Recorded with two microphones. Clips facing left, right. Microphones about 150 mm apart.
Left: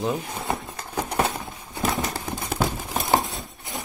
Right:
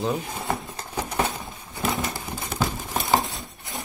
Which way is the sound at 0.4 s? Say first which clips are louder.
Even; centre (ahead or behind).